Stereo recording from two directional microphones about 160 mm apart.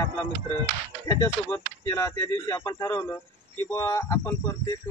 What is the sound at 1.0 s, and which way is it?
Speech, 15° left (ahead or behind).